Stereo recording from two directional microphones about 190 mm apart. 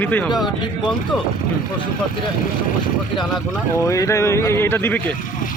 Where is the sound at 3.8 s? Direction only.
15° left (ahead or behind).